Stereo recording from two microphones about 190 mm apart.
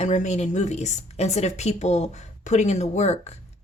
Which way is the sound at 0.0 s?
40° left (ahead or behind).